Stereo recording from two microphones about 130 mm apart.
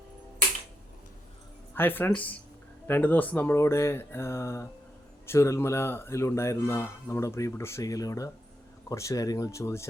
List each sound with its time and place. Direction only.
1.7 s speech: 15° left (ahead or behind)